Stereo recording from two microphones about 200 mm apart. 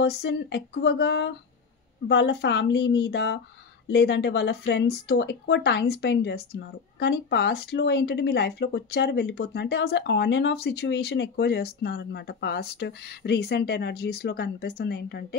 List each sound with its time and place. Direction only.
0.0 s speech: 55° left (ahead or behind)